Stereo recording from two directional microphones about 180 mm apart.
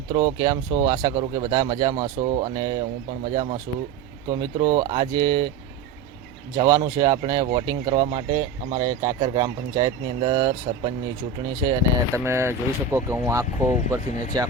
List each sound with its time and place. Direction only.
0.1 s speech: 20° right (ahead or behind)
6.6 s speech: 20° right (ahead or behind)